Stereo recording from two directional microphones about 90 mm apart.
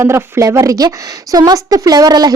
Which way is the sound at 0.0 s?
30° right (ahead or behind).